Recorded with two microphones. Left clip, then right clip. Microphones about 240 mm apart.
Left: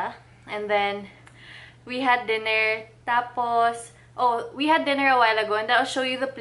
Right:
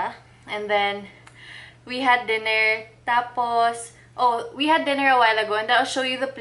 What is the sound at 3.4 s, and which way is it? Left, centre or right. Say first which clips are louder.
A woman's voice: right 1 dB; centre.